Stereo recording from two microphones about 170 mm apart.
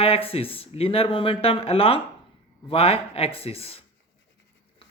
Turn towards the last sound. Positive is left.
turn(degrees=35)  # may be behind; listen again after turning